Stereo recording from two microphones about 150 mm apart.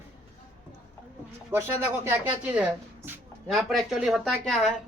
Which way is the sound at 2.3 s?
10° right (ahead or behind).